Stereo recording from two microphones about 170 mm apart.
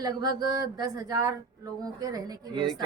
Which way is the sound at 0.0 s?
20° right (ahead or behind).